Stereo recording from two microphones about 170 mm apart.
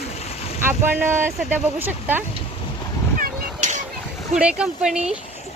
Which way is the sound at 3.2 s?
45° right (ahead or behind).